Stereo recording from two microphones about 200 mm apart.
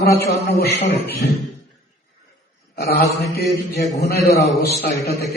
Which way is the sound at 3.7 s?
55° left (ahead or behind).